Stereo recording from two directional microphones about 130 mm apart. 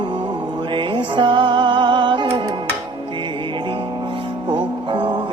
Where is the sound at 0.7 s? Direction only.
40° right (ahead or behind).